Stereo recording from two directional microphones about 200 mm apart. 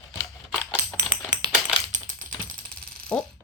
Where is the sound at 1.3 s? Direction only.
20° right (ahead or behind).